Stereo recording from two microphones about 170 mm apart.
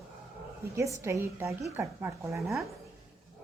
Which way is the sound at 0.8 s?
15° right (ahead or behind).